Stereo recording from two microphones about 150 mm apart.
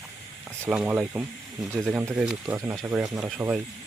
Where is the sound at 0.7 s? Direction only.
5° right (ahead or behind).